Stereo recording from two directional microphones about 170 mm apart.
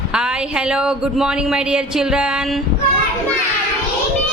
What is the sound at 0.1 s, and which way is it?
A woman's voice, 5° right (ahead or behind).